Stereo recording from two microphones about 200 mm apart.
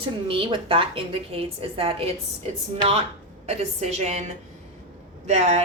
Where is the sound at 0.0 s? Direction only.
25° right (ahead or behind).